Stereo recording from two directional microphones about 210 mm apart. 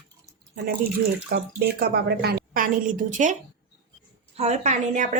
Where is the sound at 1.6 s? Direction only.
50° right (ahead or behind).